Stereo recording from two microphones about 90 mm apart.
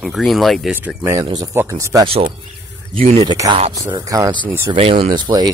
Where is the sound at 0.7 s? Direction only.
25° right (ahead or behind).